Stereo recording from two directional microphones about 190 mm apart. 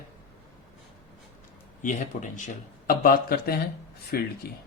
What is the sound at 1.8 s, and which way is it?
Speech, 40° left (ahead or behind).